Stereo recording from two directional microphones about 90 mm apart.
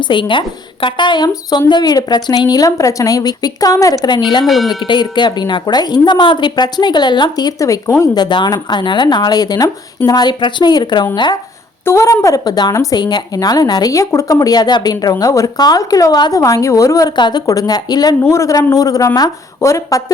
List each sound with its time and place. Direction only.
0.0 s a woman's voice: 65° left (ahead or behind); by 4.2 s 45° left (ahead or behind)
4.4 s speech: centre (ahead or behind)
4.8 s a woman's voice: 60° left (ahead or behind); by 8.1 s 35° left (ahead or behind)
8.1 s a woman's voice: 55° left (ahead or behind)
11.9 s a woman's voice: 35° left (ahead or behind)
16.4 s speech: 35° left (ahead or behind)
17.2 s a woman's voice: 55° left (ahead or behind)
17.4 s a woman's voice: 40° left (ahead or behind)
18.2 s speech: 35° left (ahead or behind)